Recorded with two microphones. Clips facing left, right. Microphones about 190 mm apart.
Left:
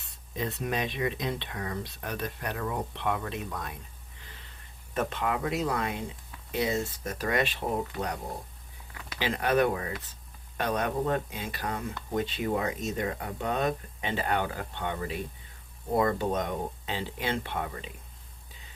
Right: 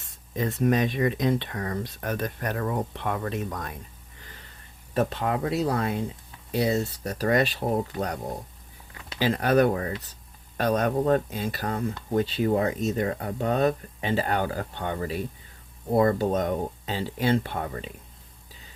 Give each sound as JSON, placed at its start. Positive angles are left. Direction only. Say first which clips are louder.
{"t": 0.3, "sound": "speech", "louder": "right 8 dB", "side_deg": -45}
{"t": 4.9, "sound": "speech", "louder": "right 4 dB", "side_deg": -35}
{"t": 9.0, "sound": "speech", "louder": "right 5 dB", "side_deg": -40}